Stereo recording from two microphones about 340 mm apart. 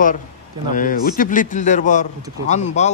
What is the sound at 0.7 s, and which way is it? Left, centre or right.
A man's voice, left.